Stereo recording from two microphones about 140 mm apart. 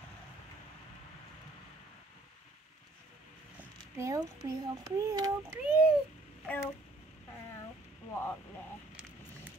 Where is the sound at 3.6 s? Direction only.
20° right (ahead or behind).